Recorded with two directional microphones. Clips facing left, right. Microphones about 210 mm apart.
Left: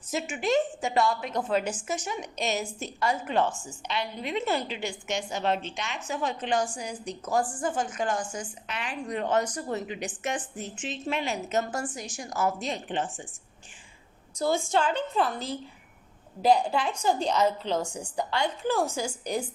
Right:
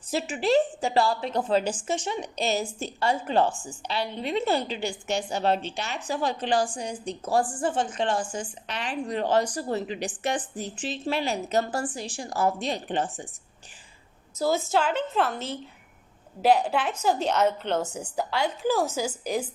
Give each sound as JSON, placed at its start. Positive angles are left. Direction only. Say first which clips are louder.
{"t": 0.1, "sound": "a woman's voice", "louder": "right 3 dB", "side_deg": -35}
{"t": 14.3, "sound": "a woman's voice", "louder": "right 1 dB", "side_deg": -5}